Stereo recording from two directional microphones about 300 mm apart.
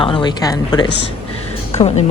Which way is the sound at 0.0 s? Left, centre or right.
Centre.